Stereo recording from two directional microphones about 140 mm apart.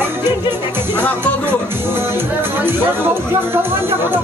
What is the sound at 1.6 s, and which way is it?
Speech, 15° right (ahead or behind).